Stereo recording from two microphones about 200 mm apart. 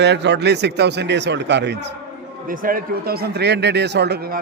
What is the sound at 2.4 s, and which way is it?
Speech, 45° right (ahead or behind).